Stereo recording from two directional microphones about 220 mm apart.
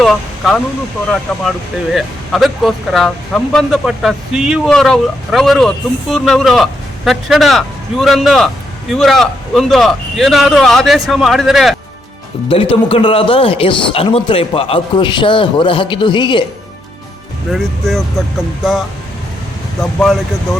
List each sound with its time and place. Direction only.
0.0 s speech: centre (ahead or behind)
12.5 s speech: 25° left (ahead or behind)
17.5 s speech: centre (ahead or behind)
20.0 s speech: centre (ahead or behind)